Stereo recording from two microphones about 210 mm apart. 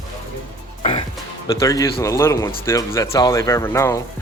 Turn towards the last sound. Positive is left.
turn(degrees=15)  # may be behind; listen again after turning